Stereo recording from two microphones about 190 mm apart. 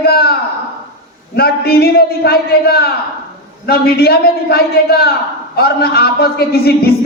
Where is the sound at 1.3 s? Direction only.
55° left (ahead or behind).